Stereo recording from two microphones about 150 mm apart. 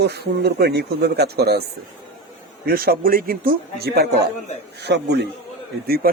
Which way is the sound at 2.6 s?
85° right.